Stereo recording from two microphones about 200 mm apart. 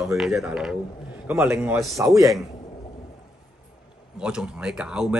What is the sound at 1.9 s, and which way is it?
Speech, 15° right (ahead or behind).